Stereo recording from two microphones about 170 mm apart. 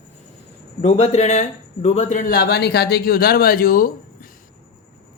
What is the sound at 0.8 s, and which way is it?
Speech, 40° left (ahead or behind).